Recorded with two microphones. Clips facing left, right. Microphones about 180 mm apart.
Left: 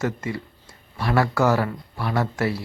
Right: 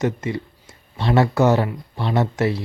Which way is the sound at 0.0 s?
20° right (ahead or behind).